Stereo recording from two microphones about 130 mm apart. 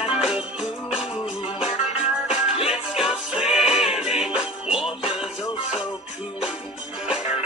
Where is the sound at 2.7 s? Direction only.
5° right (ahead or behind).